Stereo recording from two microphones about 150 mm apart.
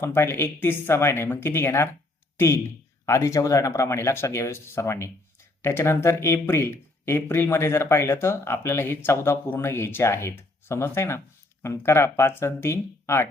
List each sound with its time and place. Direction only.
0.0 s speech: 15° left (ahead or behind)